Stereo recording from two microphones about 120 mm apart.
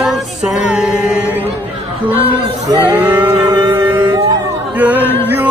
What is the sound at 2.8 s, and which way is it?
Female singing, 15° right (ahead or behind).